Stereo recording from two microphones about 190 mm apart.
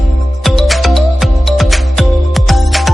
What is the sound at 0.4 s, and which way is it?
Music, centre (ahead or behind).